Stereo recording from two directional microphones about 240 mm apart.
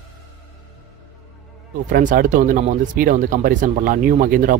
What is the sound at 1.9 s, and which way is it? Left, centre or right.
Speech, right.